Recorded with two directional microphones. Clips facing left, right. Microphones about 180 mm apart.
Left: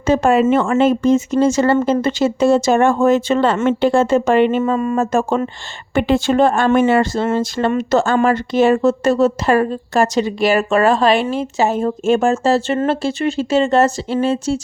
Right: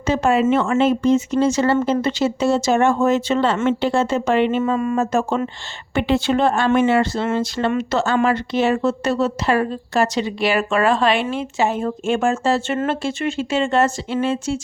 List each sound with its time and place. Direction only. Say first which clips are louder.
0.0 s speech: left 4 dB; 50° left (ahead or behind)